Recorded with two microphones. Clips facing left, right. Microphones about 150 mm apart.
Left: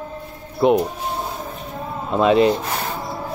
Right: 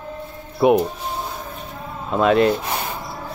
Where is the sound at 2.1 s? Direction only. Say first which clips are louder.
Left 1 dB; centre (ahead or behind).